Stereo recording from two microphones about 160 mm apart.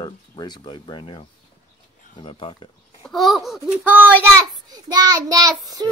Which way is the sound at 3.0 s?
Centre (ahead or behind).